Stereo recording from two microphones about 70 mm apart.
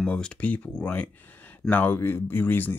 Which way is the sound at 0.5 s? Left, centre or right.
Left.